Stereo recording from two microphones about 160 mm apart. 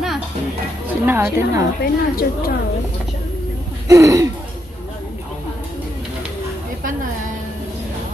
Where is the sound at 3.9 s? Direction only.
20° right (ahead or behind).